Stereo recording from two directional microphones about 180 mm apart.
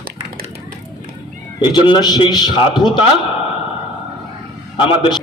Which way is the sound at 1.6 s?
25° left (ahead or behind).